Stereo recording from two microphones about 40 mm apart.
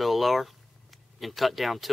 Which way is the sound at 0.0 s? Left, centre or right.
Centre.